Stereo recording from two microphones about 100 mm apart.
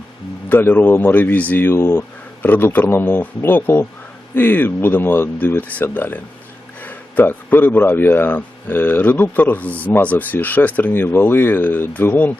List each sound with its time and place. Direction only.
0.4 s a man's voice: 20° left (ahead or behind)